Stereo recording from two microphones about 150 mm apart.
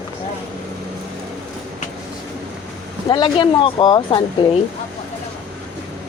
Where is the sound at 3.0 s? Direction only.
30° left (ahead or behind).